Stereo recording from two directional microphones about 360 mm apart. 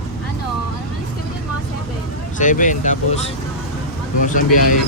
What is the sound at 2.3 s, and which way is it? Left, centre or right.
Speech, left.